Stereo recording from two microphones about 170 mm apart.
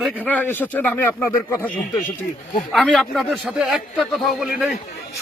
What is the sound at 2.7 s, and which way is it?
A man's voice, centre (ahead or behind).